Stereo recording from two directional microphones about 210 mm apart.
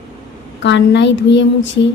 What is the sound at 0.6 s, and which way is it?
Speech, 55° left (ahead or behind).